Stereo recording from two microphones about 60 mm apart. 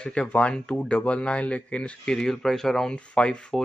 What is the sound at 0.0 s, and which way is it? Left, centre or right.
Speech, centre.